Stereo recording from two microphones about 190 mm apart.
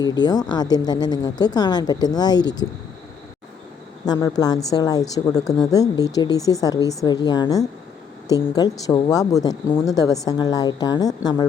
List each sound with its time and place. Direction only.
0.0 s speech: 20° left (ahead or behind)
4.0 s speech: 20° left (ahead or behind)